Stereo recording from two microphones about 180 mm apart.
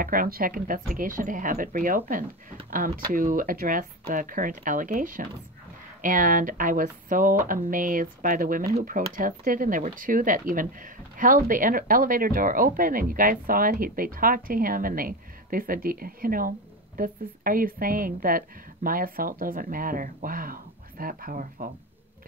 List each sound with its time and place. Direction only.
0.0 s speech: 55° right (ahead or behind)
3.1 s speech: 50° right (ahead or behind)